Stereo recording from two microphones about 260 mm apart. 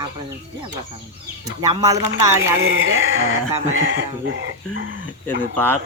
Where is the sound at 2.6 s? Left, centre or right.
Right.